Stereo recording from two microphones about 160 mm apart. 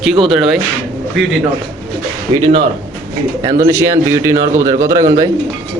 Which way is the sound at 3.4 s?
20° right (ahead or behind).